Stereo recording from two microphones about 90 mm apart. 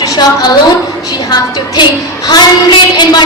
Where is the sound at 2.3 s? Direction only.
55° left (ahead or behind).